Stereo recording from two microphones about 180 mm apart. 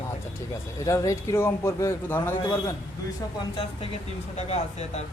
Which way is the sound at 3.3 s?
30° left (ahead or behind).